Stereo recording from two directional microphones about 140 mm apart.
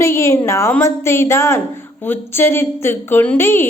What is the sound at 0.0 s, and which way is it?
A woman's voice, 20° left (ahead or behind).